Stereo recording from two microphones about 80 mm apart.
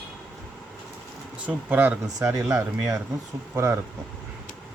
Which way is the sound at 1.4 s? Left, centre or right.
Centre.